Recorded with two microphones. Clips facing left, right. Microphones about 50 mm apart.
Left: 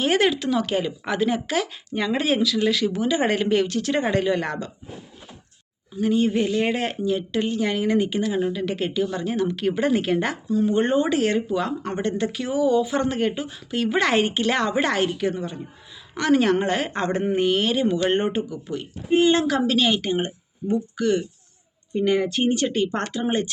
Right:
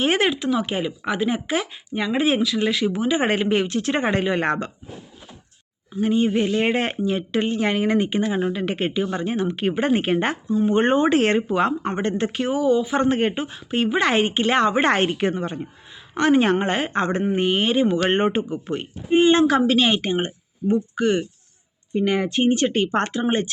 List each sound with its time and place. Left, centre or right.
0.0 s a woman's voice: right
6.0 s speech: right
10.7 s a woman's voice: right
12.7 s a woman's voice: right
16.1 s a woman's voice: right
19.1 s a woman's voice: right